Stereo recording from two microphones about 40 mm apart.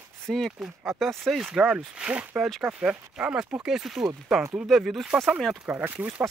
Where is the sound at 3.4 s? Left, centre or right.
Centre.